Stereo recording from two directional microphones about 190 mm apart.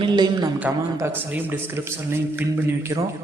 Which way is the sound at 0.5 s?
10° right (ahead or behind).